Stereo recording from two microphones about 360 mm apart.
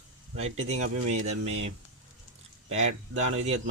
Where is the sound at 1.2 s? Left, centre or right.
Right.